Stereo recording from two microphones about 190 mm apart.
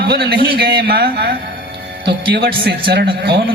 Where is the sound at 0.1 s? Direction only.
55° right (ahead or behind).